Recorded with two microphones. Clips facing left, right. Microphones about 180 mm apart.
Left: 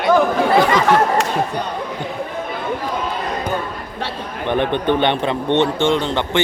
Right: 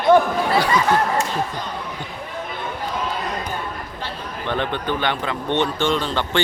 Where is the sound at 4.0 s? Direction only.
80° left.